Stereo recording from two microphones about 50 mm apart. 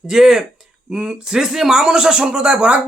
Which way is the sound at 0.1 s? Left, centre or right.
Centre.